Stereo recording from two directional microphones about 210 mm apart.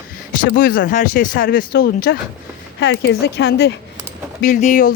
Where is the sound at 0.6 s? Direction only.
40° left (ahead or behind).